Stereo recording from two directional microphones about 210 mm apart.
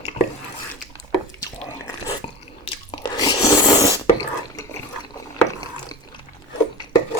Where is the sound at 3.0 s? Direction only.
20° left (ahead or behind).